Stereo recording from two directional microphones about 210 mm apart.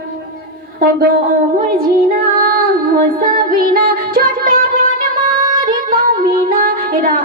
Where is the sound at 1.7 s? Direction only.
45° right (ahead or behind).